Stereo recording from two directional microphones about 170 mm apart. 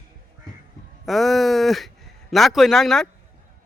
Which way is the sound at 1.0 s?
Centre (ahead or behind).